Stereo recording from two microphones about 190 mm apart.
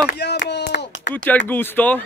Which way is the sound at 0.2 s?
60° left (ahead or behind).